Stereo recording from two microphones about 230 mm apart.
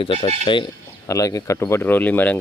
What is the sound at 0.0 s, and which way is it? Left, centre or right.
Speech, left.